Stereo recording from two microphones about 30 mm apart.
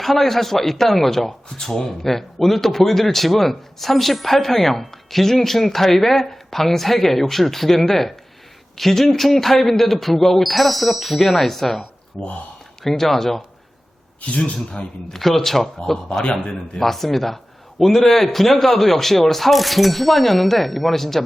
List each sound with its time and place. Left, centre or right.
0.0 s a man's voice: centre
12.8 s a man's voice: centre
14.2 s a man's voice: left
15.1 s a man's voice: centre
16.2 s a man's voice: left
16.7 s a man's voice: centre